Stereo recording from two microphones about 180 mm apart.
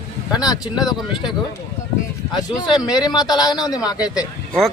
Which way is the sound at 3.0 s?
20° left (ahead or behind).